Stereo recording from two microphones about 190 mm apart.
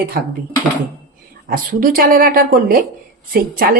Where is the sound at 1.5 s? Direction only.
50° right (ahead or behind).